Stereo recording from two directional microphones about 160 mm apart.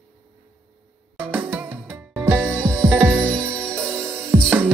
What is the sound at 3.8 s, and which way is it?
Music, 15° right (ahead or behind).